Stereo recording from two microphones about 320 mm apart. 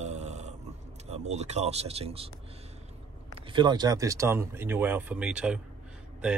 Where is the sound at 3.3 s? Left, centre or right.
Centre.